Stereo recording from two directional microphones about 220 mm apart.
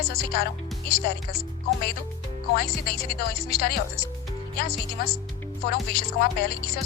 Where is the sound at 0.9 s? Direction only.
45° left (ahead or behind).